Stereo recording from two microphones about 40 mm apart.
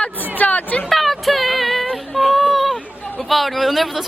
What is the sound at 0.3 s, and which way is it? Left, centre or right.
Hubbub, left.